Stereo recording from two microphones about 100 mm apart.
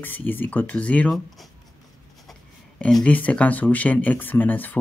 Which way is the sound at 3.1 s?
15° left (ahead or behind).